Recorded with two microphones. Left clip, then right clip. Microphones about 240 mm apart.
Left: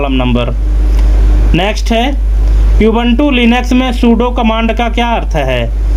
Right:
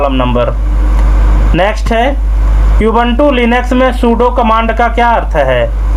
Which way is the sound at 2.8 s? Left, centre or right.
Left.